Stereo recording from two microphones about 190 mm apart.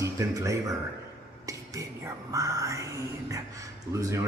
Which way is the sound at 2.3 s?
15° right (ahead or behind).